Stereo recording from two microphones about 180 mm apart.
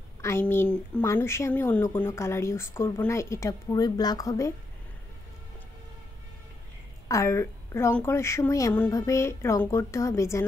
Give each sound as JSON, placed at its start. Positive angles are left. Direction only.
{"t": 0.2, "sound": "speech", "side_deg": 15}
{"t": 7.1, "sound": "speech", "side_deg": 15}